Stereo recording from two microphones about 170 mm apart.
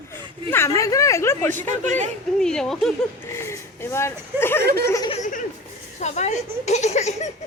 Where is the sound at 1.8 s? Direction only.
45° right (ahead or behind).